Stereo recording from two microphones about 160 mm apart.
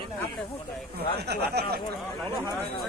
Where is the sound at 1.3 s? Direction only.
90° right.